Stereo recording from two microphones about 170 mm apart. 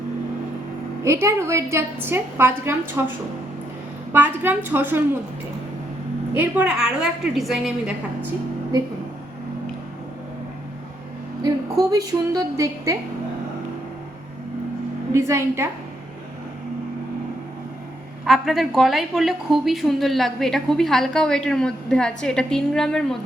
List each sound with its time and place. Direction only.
1.0 s a woman's voice: 15° right (ahead or behind)
4.1 s a woman's voice: 10° right (ahead or behind)
6.3 s a woman's voice: 10° right (ahead or behind)
11.8 s a woman's voice: 20° right (ahead or behind)
15.1 s a woman's voice: 15° right (ahead or behind)
18.3 s a woman's voice: centre (ahead or behind)